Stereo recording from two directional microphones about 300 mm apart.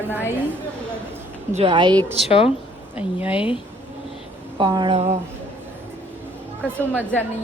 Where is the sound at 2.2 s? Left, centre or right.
Centre.